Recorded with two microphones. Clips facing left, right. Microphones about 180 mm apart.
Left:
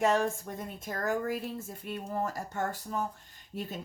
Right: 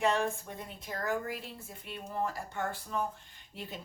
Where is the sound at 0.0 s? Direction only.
45° left (ahead or behind).